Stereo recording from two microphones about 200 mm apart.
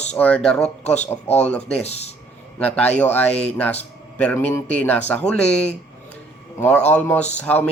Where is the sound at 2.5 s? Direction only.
5° left (ahead or behind).